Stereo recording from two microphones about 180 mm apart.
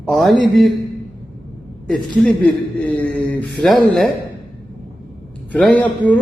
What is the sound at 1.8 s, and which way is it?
A man's voice, 5° left (ahead or behind).